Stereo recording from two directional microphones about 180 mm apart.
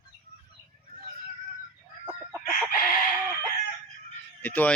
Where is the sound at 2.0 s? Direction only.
10° right (ahead or behind).